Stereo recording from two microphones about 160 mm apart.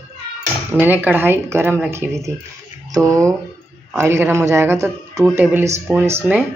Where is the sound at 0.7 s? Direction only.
10° right (ahead or behind).